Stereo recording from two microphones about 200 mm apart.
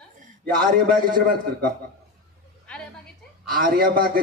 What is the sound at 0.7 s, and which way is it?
Speech, 45° right (ahead or behind).